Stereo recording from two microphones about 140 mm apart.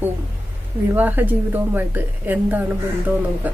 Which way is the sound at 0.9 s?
15° right (ahead or behind).